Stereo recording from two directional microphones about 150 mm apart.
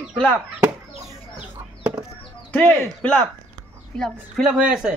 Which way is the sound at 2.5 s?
10° left (ahead or behind).